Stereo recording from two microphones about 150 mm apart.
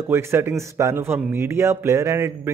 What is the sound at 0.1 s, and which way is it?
A man's voice, 15° right (ahead or behind).